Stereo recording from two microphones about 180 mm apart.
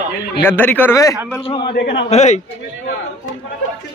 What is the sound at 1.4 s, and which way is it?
Speech, 30° left (ahead or behind).